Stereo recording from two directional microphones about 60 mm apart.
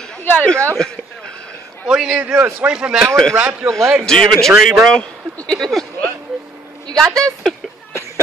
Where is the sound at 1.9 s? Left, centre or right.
Centre.